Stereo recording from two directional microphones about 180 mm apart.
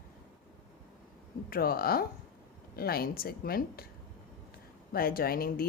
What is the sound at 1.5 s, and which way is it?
Speech, 55° left (ahead or behind).